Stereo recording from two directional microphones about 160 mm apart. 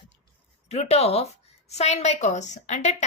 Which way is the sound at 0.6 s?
45° left (ahead or behind).